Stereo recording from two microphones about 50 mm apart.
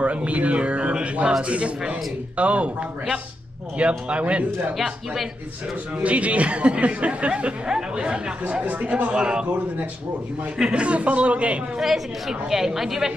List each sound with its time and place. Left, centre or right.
0.0 s speech: right
3.7 s speech: right
4.7 s speech: centre
6.0 s speech: right
10.7 s speech: right
11.8 s a woman's voice: centre